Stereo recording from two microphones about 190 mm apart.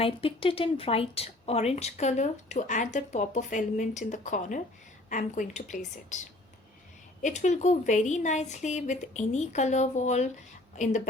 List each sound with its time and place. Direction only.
0.0 s speech: 30° left (ahead or behind)